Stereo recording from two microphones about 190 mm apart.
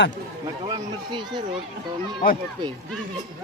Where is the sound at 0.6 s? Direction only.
25° right (ahead or behind).